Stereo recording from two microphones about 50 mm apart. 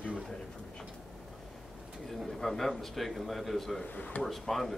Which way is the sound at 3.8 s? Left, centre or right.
Left.